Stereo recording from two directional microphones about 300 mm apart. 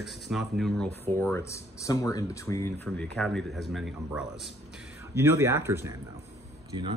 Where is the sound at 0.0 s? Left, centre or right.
Centre.